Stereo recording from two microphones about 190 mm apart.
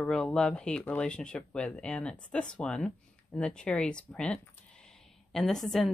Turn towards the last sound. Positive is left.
turn(degrees=0)  # may be behind; listen again after turning